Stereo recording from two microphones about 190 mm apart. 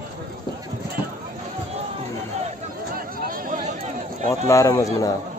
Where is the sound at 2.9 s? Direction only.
45° right (ahead or behind).